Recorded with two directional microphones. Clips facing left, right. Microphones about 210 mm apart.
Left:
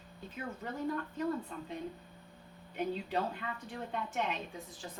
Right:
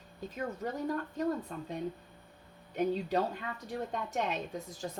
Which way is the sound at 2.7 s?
40° right (ahead or behind).